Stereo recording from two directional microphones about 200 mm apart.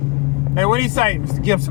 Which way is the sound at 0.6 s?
20° right (ahead or behind).